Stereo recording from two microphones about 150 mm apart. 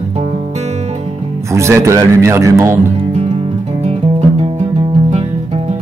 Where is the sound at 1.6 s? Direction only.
20° right (ahead or behind).